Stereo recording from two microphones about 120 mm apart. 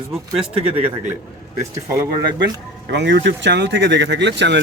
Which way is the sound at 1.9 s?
30° right (ahead or behind).